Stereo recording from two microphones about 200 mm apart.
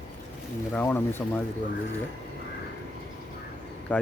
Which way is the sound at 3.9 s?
5° left (ahead or behind).